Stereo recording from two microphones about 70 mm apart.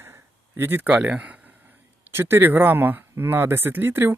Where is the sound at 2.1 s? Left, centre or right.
Right.